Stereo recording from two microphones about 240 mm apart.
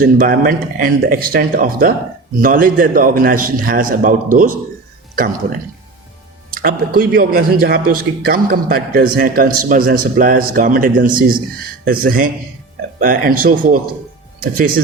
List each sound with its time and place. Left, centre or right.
0.0 s speech: right